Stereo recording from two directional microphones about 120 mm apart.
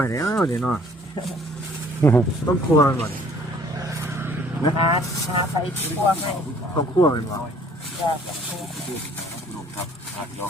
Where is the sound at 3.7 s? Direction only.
25° right (ahead or behind).